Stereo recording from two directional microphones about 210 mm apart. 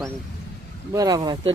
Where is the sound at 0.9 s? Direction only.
15° right (ahead or behind).